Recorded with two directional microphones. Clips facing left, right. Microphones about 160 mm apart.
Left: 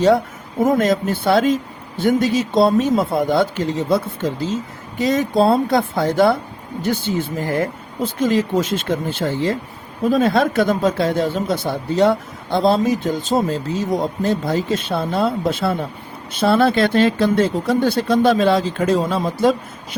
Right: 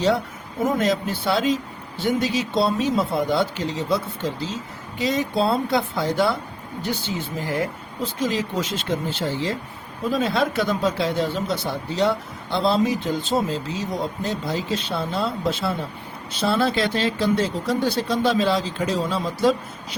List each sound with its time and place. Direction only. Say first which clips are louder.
0.6 s speech: left 5 dB; 50° left (ahead or behind)